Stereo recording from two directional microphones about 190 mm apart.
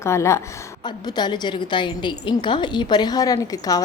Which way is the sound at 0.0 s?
15° left (ahead or behind).